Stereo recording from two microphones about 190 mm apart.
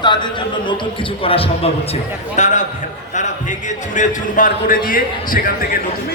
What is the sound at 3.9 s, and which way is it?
A man's voice, 45° left (ahead or behind).